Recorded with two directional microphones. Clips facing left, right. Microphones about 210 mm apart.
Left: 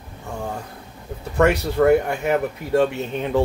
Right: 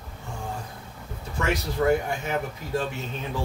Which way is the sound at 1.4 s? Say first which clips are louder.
Left 8 dB; 65° left (ahead or behind).